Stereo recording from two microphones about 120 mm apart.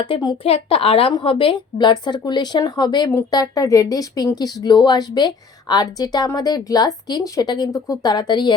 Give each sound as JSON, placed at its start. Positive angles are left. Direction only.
{"t": 0.0, "sound": "speech", "side_deg": 40}
{"t": 0.4, "sound": "speech", "side_deg": 50}